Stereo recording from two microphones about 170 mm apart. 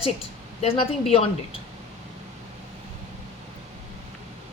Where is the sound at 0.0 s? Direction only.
35° left (ahead or behind).